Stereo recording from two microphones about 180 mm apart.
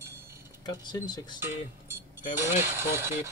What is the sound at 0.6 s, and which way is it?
Speech, 25° left (ahead or behind).